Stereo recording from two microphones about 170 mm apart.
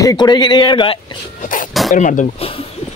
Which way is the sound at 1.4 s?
50° left (ahead or behind).